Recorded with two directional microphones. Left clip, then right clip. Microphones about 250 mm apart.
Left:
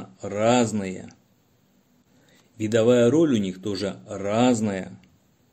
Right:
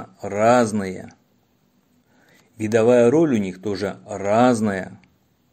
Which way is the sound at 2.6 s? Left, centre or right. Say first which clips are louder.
Right 3 dB; centre.